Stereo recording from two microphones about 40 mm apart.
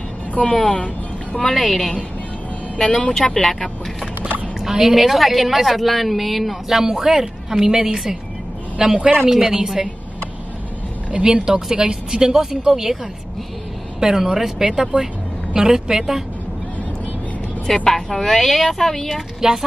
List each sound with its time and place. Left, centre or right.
0.3 s speech: left
1.4 s speech: centre
2.8 s speech: left
3.1 s speech: centre
4.6 s a woman's voice: centre
9.0 s speech: right
9.3 s a woman's voice: centre
11.1 s a woman's voice: right
13.9 s a woman's voice: centre
14.6 s a woman's voice: right
17.8 s speech: centre